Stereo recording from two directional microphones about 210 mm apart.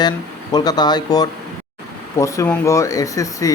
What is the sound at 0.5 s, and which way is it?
Speech, 20° left (ahead or behind).